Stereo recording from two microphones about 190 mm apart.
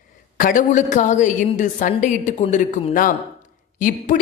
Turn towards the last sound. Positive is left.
turn(degrees=45)  # may be behind; listen again after turning